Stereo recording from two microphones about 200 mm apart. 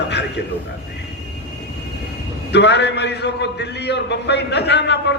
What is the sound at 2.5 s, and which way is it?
A man's voice, 60° left (ahead or behind).